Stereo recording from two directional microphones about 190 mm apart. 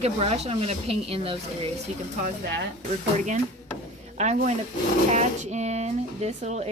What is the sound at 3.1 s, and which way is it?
Speech, 40° right (ahead or behind).